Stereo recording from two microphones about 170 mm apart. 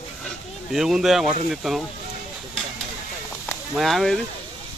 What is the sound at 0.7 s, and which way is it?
Speech, centre (ahead or behind).